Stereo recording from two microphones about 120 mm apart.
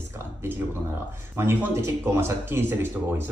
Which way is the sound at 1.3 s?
20° right (ahead or behind).